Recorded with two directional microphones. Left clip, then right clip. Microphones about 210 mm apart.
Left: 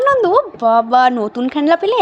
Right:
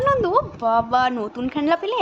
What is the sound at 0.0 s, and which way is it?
Speech, 20° left (ahead or behind).